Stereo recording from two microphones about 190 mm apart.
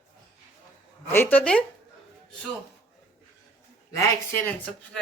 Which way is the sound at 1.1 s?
10° left (ahead or behind).